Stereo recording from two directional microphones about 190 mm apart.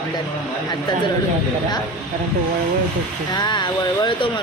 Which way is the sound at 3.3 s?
20° left (ahead or behind).